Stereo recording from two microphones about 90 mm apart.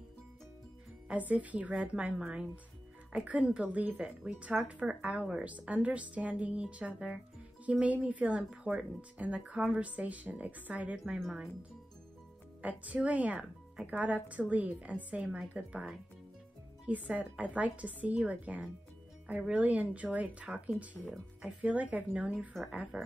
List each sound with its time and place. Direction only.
1.0 s speech: 15° right (ahead or behind)
12.6 s speech: 15° right (ahead or behind)
21.0 s speech: 5° right (ahead or behind)
21.5 s speech: 15° right (ahead or behind)